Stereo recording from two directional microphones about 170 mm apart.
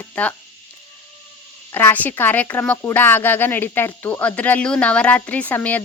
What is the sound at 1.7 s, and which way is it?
A woman's voice, 10° left (ahead or behind).